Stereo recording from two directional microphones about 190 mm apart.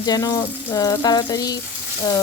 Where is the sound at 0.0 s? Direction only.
20° left (ahead or behind).